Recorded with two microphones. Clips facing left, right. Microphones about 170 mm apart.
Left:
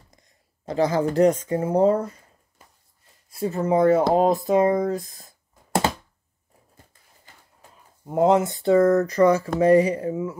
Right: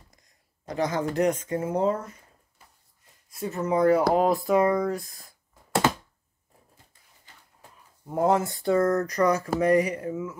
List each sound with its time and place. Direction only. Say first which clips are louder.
0.7 s speech: left 5 dB; 30° left (ahead or behind)
3.3 s speech: left 5 dB; 30° left (ahead or behind)
8.0 s speech: left 5 dB; 20° left (ahead or behind)